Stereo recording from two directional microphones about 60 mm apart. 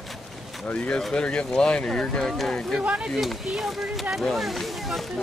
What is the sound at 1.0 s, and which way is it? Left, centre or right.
Speech, centre.